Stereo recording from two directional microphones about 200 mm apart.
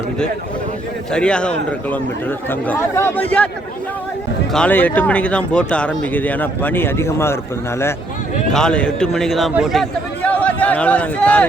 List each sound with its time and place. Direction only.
1.1 s a man's voice: 5° left (ahead or behind)
4.5 s speech: 5° left (ahead or behind)
8.5 s a man's voice: 5° left (ahead or behind)